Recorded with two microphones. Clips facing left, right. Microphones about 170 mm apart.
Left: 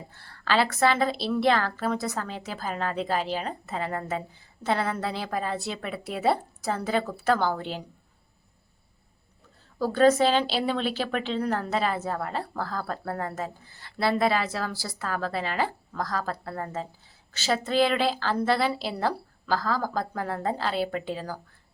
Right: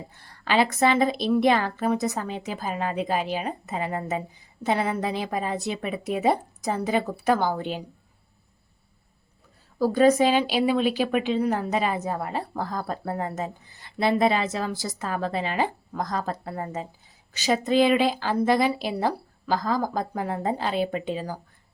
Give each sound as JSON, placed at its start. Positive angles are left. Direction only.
{"t": 0.1, "sound": "a woman's voice", "side_deg": -15}
{"t": 9.7, "sound": "a woman's voice", "side_deg": -10}